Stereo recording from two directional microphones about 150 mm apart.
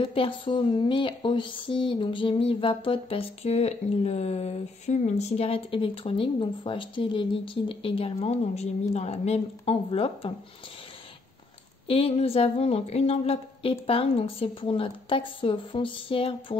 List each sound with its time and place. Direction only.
0.0 s speech: 35° left (ahead or behind)
11.9 s speech: 40° left (ahead or behind)